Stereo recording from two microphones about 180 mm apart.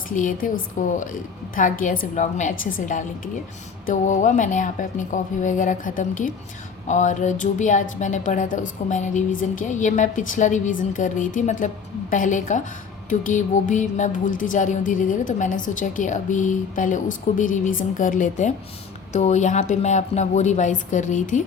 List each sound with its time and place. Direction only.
0.2 s a woman's voice: 50° left (ahead or behind)